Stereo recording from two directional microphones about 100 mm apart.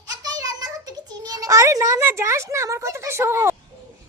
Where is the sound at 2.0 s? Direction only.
25° right (ahead or behind).